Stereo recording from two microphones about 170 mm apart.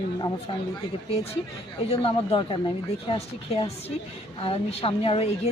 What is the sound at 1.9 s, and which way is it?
A woman's voice, 35° left (ahead or behind).